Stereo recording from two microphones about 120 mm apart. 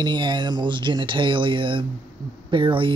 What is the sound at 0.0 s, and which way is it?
Speech, 40° right (ahead or behind).